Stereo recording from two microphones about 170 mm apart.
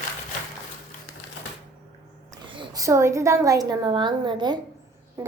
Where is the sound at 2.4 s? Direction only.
30° right (ahead or behind).